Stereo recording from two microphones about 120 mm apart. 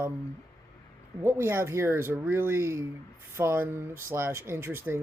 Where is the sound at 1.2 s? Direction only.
20° right (ahead or behind).